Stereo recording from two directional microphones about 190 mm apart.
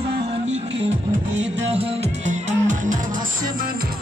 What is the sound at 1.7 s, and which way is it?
Music, 35° right (ahead or behind).